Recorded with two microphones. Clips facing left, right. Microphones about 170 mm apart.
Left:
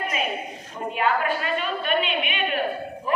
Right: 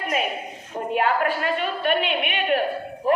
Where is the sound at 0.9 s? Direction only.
55° right (ahead or behind).